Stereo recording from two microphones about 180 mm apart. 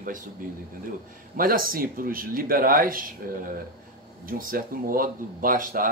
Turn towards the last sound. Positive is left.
turn(degrees=-50)  # may be behind; listen again after turning